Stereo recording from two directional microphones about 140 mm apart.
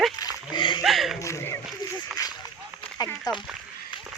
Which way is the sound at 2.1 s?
Centre (ahead or behind).